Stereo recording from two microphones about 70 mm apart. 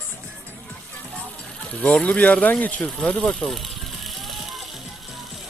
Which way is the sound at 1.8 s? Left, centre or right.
Centre.